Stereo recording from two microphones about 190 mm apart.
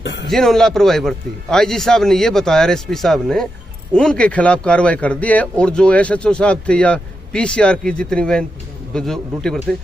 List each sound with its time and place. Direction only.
0.0 s speech: 70° left (ahead or behind)
0.3 s a man's voice: centre (ahead or behind)